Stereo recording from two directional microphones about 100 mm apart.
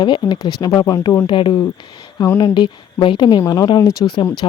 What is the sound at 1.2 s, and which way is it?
Speech, 55° left (ahead or behind).